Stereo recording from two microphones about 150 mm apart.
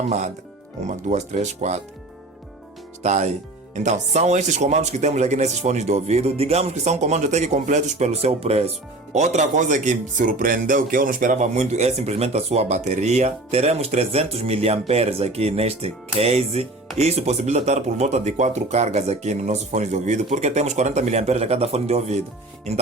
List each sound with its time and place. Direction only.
0.9 s speech: 50° right (ahead or behind)
3.0 s speech: 50° right (ahead or behind)